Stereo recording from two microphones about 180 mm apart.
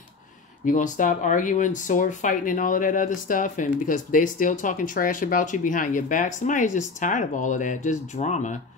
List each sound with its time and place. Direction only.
0.7 s speech: 45° left (ahead or behind)